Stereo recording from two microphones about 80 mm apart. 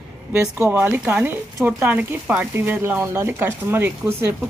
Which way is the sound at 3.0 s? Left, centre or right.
Right.